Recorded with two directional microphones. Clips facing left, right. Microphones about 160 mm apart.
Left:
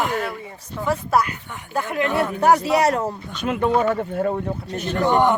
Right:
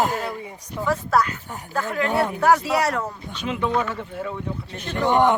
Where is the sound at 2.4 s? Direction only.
20° left (ahead or behind).